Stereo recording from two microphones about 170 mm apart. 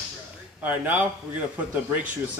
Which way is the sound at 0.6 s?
10° right (ahead or behind).